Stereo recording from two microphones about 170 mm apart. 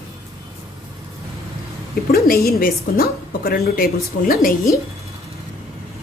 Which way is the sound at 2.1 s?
65° left (ahead or behind).